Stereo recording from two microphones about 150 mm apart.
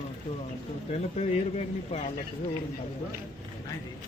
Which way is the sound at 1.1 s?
45° left (ahead or behind).